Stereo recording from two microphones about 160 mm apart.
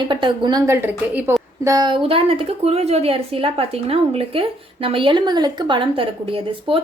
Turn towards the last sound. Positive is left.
turn(degrees=-35)  # may be behind; listen again after turning